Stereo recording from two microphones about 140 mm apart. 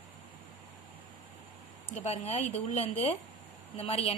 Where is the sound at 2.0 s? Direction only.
50° left (ahead or behind).